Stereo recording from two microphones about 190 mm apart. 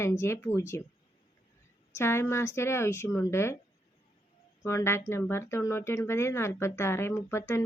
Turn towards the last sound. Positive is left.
turn(degrees=15)  # may be behind; listen again after turning